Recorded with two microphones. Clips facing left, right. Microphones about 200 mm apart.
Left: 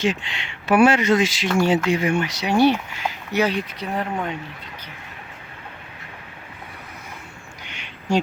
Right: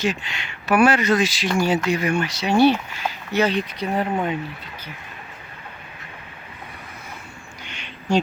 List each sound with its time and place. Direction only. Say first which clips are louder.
0.0 s speech: left 1 dB; 25° left (ahead or behind); by 3.8 s 10° left (ahead or behind)
3.9 s speech: right 3 dB; 5° right (ahead or behind)
7.7 s a sound: right 1 dB; 15° left (ahead or behind)